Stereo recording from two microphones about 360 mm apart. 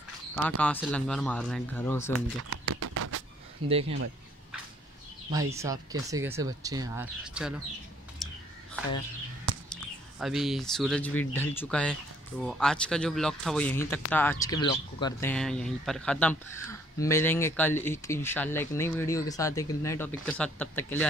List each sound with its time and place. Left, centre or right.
0.4 s speech: centre
2.5 s a sound: right
3.6 s speech: centre
5.3 s speech: centre
8.2 s a sound: centre
10.2 s speech: centre